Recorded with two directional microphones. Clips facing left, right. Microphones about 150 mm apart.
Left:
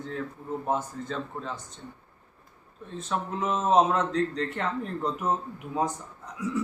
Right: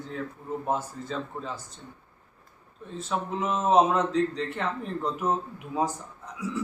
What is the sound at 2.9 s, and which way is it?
A man's voice, 5° right (ahead or behind).